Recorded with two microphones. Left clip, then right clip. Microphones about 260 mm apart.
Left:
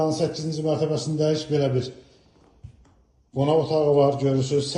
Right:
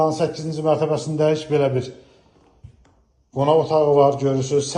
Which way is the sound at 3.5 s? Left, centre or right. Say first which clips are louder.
Right 4 dB; centre.